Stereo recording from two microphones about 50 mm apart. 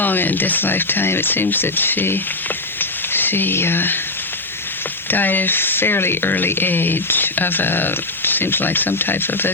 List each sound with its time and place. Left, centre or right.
0.0 s speech: left
5.1 s speech: left